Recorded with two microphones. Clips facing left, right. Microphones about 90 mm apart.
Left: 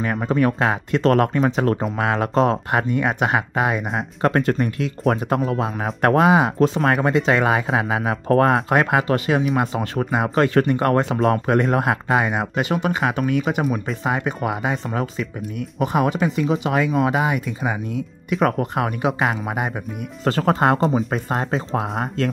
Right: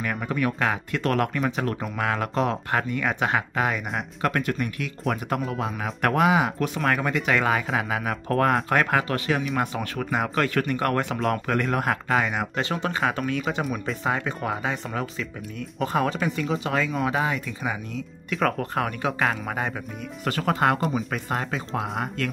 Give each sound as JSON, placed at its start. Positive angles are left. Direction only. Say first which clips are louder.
{"t": 0.0, "sound": "speech", "louder": "left 7 dB", "side_deg": 30}
{"t": 2.0, "sound": "speech", "louder": "left 4 dB", "side_deg": 25}
{"t": 2.9, "sound": "speech", "louder": "left 5 dB", "side_deg": 20}
{"t": 4.3, "sound": "speech", "louder": "left 8 dB", "side_deg": 35}
{"t": 20.2, "sound": "speech", "louder": "left 5 dB", "side_deg": 35}